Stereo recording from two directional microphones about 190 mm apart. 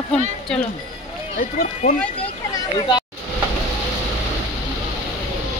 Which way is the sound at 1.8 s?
40° left (ahead or behind).